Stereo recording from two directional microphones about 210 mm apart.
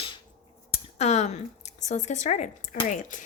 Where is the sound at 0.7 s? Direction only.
30° left (ahead or behind).